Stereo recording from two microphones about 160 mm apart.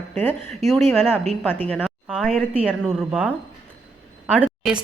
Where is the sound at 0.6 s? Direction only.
Centre (ahead or behind).